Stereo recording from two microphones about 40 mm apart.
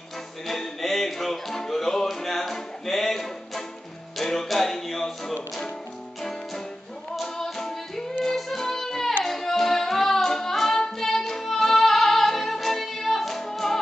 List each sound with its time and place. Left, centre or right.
0.5 s music: centre
7.4 s music: centre
9.2 s singing: centre